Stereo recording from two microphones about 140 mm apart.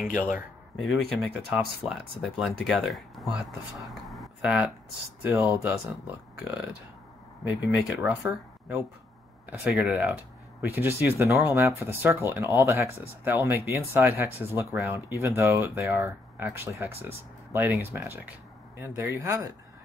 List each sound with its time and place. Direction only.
0.7 s speech: centre (ahead or behind); by 19.4 s 20° right (ahead or behind)